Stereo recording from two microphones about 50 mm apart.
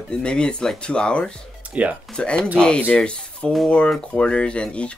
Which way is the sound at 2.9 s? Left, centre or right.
Centre.